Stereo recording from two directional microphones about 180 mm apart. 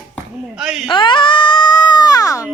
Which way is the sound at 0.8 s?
25° left (ahead or behind).